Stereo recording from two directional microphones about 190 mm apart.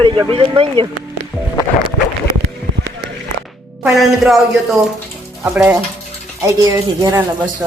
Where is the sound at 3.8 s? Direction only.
Centre (ahead or behind).